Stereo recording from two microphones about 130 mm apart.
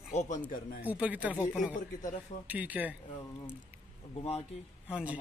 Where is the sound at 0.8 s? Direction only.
10° right (ahead or behind).